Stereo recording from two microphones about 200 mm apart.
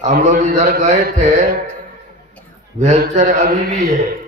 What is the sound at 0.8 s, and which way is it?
Speech, 35° right (ahead or behind).